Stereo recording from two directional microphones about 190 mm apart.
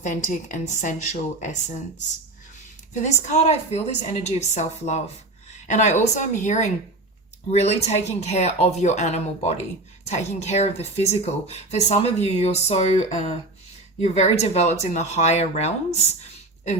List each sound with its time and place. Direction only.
0.0 s speech: 40° left (ahead or behind)